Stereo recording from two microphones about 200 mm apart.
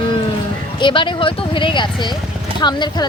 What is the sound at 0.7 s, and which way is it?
Speech, 25° left (ahead or behind).